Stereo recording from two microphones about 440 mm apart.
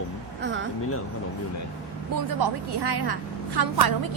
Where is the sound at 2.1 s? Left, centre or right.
Right.